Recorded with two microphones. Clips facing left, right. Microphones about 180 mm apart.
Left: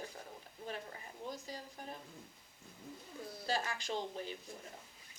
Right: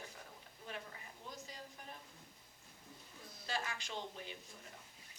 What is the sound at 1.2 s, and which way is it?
Speech, 35° left (ahead or behind).